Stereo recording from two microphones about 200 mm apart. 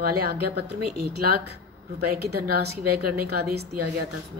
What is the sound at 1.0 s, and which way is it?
A woman's voice, 50° right (ahead or behind).